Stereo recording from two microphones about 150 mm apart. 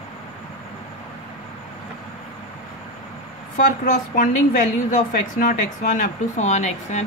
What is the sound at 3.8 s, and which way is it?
A woman's voice, 60° left (ahead or behind).